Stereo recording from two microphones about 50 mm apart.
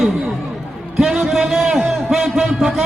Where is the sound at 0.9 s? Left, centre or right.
Centre.